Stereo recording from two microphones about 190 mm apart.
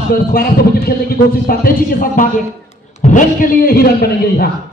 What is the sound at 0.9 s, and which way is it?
Speech, 50° left (ahead or behind).